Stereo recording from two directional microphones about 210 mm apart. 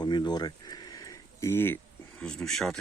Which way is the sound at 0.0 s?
20° left (ahead or behind).